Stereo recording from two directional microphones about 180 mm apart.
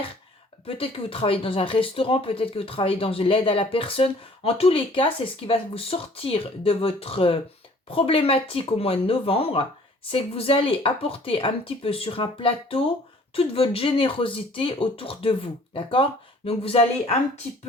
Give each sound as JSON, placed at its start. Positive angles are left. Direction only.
{"t": 0.8, "sound": "speech", "side_deg": 30}